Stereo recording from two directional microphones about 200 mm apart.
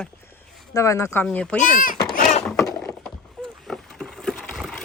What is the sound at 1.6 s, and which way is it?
Speech, 40° left (ahead or behind).